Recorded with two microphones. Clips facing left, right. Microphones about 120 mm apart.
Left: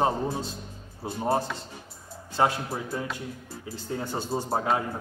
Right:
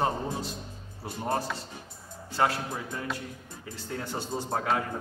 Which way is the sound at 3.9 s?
25° left (ahead or behind).